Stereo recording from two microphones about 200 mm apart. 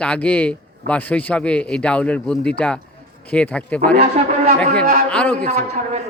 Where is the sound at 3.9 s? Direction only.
30° right (ahead or behind).